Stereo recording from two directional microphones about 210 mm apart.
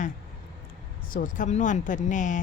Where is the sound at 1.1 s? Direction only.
40° left (ahead or behind).